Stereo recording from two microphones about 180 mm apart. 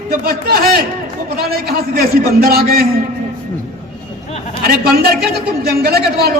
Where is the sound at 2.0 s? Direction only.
60° right (ahead or behind).